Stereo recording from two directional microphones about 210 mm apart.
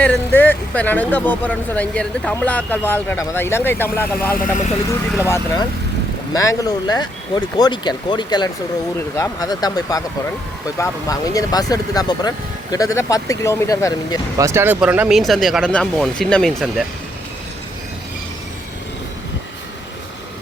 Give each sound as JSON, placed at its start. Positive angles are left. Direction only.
{"t": 0.0, "sound": "speech", "side_deg": 10}
{"t": 4.4, "sound": "speech", "side_deg": 40}
{"t": 6.3, "sound": "speech", "side_deg": 15}
{"t": 14.3, "sound": "speech", "side_deg": -15}